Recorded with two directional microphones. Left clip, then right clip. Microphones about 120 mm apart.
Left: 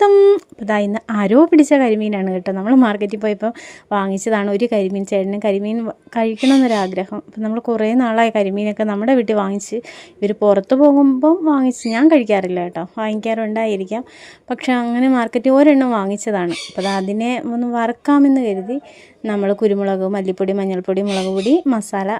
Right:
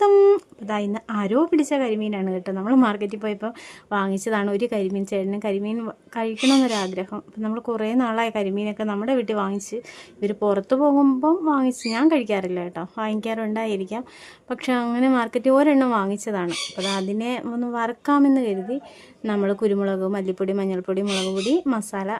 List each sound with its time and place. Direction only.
0.1 s a sound: 20° left (ahead or behind)
0.3 s speech: 40° left (ahead or behind)
10.9 s speech: 10° left (ahead or behind)
11.2 s speech: 30° left (ahead or behind)